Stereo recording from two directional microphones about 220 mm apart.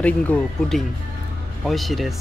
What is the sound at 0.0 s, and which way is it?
Speech, 5° left (ahead or behind).